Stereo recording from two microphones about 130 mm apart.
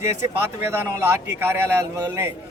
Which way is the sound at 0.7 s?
20° right (ahead or behind).